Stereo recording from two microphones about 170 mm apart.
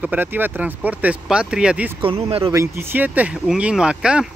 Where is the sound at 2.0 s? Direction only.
35° right (ahead or behind).